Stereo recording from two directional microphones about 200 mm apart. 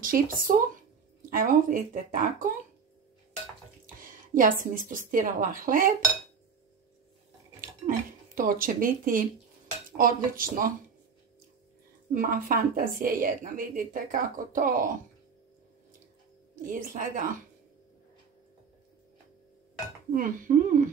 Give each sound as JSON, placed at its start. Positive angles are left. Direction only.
{"t": 0.0, "sound": "a woman's voice", "side_deg": -45}
{"t": 3.8, "sound": "a woman's voice", "side_deg": -45}
{"t": 8.4, "sound": "a woman's voice", "side_deg": -45}
{"t": 12.1, "sound": "a woman's voice", "side_deg": -45}
{"t": 16.6, "sound": "a woman's voice", "side_deg": -45}
{"t": 20.1, "sound": "a woman's voice", "side_deg": -45}